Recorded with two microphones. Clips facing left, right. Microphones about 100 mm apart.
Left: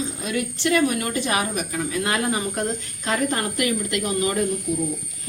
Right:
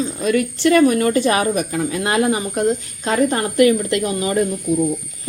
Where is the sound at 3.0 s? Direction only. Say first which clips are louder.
Right 6 dB; 30° right (ahead or behind).